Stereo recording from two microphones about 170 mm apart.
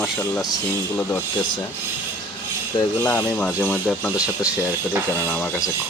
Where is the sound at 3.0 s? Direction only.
20° left (ahead or behind).